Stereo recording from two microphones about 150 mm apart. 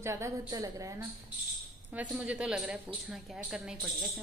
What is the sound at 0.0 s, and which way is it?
A woman's voice, 20° right (ahead or behind).